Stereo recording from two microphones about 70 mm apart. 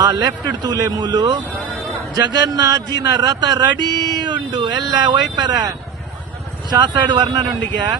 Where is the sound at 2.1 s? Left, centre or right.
Right.